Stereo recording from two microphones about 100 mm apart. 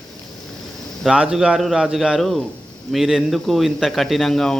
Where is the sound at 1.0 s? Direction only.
5° right (ahead or behind).